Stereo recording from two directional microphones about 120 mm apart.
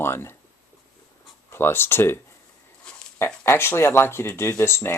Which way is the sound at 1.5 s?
20° left (ahead or behind).